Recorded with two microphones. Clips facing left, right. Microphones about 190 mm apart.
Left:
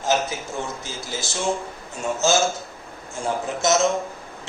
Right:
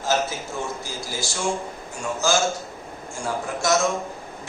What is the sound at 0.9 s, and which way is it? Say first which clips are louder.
A man's voice: even; 20° left (ahead or behind).